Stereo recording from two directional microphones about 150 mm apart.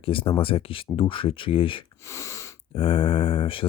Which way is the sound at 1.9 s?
20° left (ahead or behind).